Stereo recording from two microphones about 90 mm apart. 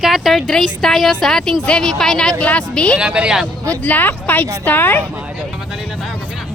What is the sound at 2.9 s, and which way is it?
Speech, 10° right (ahead or behind).